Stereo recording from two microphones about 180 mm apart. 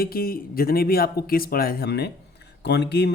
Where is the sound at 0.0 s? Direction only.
55° left (ahead or behind).